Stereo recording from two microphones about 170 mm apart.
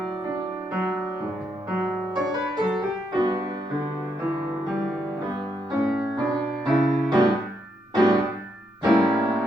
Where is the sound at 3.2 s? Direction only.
20° right (ahead or behind).